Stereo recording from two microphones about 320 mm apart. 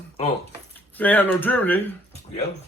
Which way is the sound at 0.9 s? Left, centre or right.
Centre.